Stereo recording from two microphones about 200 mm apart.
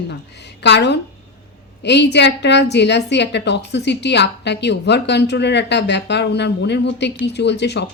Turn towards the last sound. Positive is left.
turn(degrees=60)  # may be behind; listen again after turning